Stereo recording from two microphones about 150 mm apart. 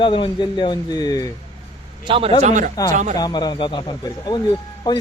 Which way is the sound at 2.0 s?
35° right (ahead or behind).